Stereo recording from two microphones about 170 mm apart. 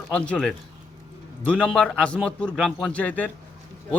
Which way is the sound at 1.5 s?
5° left (ahead or behind).